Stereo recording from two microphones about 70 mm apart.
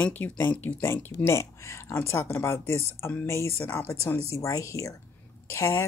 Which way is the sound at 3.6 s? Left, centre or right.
Left.